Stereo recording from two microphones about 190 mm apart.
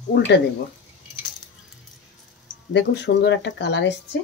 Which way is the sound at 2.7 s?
65° left (ahead or behind).